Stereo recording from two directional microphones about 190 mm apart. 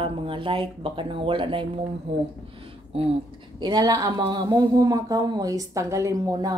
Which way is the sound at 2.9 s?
30° right (ahead or behind).